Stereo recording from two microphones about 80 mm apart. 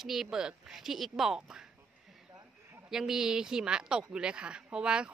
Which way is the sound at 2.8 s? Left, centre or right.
Centre.